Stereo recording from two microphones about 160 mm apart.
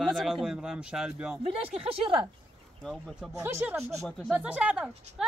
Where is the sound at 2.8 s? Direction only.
Centre (ahead or behind).